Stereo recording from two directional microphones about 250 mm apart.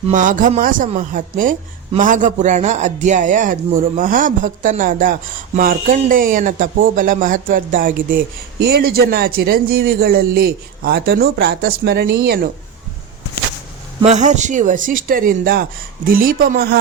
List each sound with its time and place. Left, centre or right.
0.1 s speech: right
14.0 s speech: right